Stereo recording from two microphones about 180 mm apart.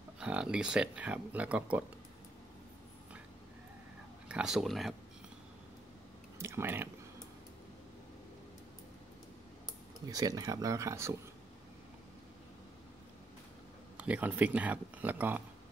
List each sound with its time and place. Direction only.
0.2 s speech: 5° right (ahead or behind)
4.3 s speech: 5° right (ahead or behind)
6.3 s speech: 15° right (ahead or behind)
10.0 s speech: 20° right (ahead or behind)
13.9 s speech: 10° right (ahead or behind)